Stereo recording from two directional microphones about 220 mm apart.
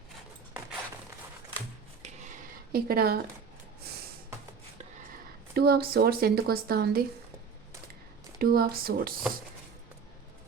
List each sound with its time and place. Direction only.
2.7 s a woman's voice: 45° right (ahead or behind)
5.5 s a woman's voice: 45° right (ahead or behind)
8.4 s a woman's voice: 45° right (ahead or behind)